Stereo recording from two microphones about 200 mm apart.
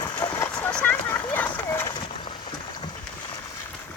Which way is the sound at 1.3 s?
10° left (ahead or behind).